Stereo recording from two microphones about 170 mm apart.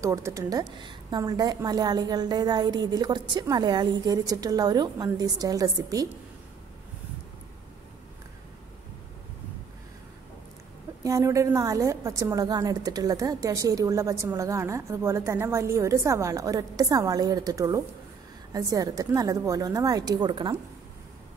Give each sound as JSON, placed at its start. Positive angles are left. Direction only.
{"t": 0.0, "sound": "a woman's voice", "side_deg": -20}
{"t": 11.1, "sound": "a woman's voice", "side_deg": -20}